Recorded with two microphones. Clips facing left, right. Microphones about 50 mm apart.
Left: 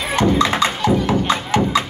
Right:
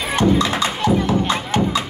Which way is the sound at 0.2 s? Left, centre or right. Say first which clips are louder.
Left 1 dB; left.